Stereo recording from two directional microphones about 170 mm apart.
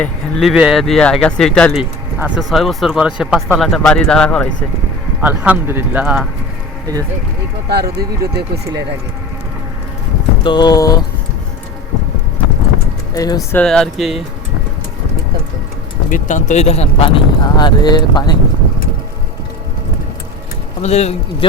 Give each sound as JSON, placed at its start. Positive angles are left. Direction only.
{"t": 0.0, "sound": "speech", "side_deg": 0}
{"t": 1.8, "sound": "a sound", "side_deg": -10}
{"t": 2.5, "sound": "speech", "side_deg": 0}
{"t": 5.2, "sound": "speech", "side_deg": -10}
{"t": 7.7, "sound": "speech", "side_deg": -70}
{"t": 10.4, "sound": "speech", "side_deg": 25}
{"t": 13.1, "sound": "speech", "side_deg": 20}
{"t": 13.6, "sound": "speech", "side_deg": 5}
{"t": 16.0, "sound": "speech", "side_deg": 50}
{"t": 20.8, "sound": "speech", "side_deg": 40}